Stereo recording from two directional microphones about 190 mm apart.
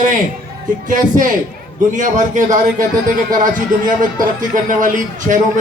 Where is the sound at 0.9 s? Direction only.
45° right (ahead or behind).